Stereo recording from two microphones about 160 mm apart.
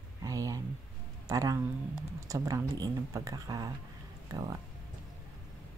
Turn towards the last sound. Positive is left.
turn(degrees=-20)  # may be behind; listen again after turning